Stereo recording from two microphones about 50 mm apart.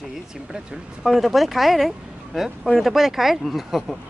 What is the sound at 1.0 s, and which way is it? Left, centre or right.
Speech, centre.